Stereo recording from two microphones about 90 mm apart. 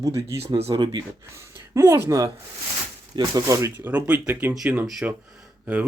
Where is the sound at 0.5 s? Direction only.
55° right (ahead or behind).